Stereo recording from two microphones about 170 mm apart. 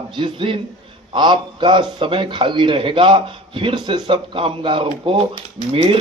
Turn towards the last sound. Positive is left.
turn(degrees=-35)  # may be behind; listen again after turning